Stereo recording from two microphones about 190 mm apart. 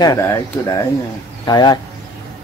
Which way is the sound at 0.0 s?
20° left (ahead or behind).